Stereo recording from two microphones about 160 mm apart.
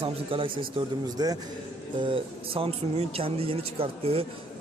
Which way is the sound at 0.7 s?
25° right (ahead or behind).